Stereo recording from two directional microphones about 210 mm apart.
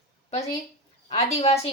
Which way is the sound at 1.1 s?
30° left (ahead or behind).